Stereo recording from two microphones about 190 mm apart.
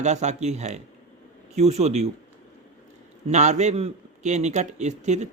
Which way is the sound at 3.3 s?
35° right (ahead or behind).